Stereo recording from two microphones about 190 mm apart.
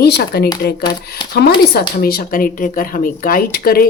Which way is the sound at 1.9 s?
55° left (ahead or behind).